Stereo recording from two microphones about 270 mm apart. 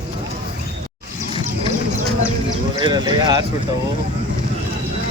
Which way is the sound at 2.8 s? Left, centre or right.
Centre.